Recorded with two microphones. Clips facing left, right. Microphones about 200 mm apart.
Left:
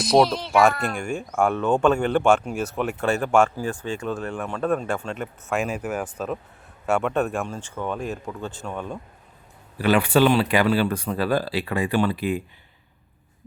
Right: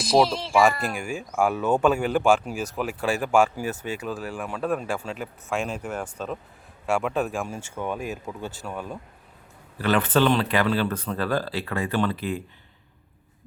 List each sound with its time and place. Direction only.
0.0 s speech: centre (ahead or behind)
9.7 s speech: 10° left (ahead or behind)